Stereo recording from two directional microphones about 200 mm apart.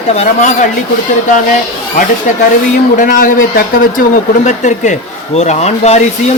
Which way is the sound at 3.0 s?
40° left (ahead or behind).